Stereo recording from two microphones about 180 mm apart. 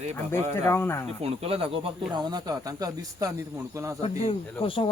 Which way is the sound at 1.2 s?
35° right (ahead or behind).